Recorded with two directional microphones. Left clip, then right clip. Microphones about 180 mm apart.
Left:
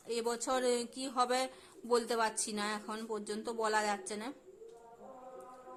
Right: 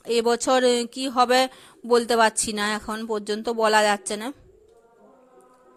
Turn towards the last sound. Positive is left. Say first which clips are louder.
# right 14 dB
turn(degrees=-40)  # may be behind; listen again after turning